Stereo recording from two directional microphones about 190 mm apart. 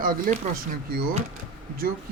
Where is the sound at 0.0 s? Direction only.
45° right (ahead or behind).